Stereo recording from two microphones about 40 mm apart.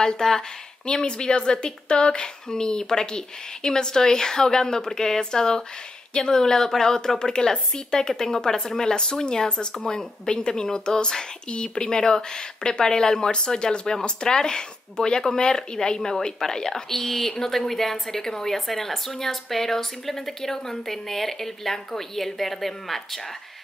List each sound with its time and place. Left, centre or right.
0.0 s speech: centre